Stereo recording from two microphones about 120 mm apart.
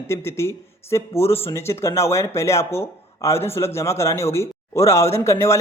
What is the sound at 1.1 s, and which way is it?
Speech, 55° left (ahead or behind).